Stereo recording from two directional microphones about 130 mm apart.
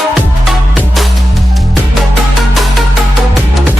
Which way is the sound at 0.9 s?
Centre (ahead or behind).